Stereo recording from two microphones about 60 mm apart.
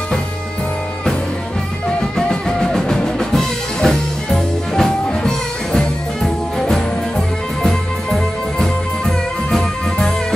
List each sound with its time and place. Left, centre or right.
1.9 s music: centre